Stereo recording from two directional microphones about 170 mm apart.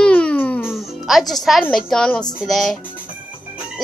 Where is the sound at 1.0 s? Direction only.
Centre (ahead or behind).